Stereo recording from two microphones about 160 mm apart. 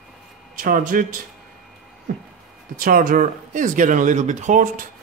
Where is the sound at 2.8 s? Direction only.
60° right (ahead or behind).